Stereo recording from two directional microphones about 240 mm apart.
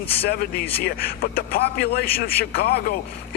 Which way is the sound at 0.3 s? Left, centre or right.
Left.